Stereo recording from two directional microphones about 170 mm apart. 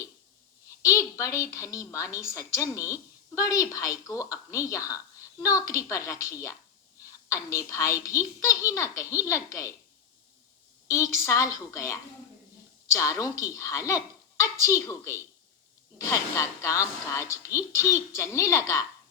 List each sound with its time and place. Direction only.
0.8 s a woman's voice: 20° left (ahead or behind)
10.8 s speech: 20° left (ahead or behind)